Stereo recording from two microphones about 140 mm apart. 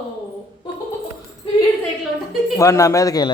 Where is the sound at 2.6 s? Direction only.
20° left (ahead or behind).